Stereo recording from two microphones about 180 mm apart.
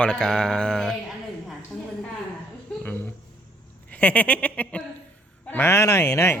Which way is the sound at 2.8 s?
10° left (ahead or behind).